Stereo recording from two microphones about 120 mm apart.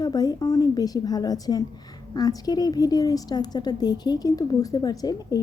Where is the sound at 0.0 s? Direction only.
30° left (ahead or behind).